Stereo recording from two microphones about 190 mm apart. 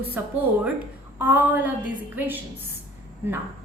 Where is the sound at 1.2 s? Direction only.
10° right (ahead or behind).